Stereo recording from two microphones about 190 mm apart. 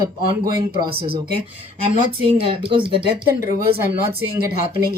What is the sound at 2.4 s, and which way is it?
Speech, 30° right (ahead or behind).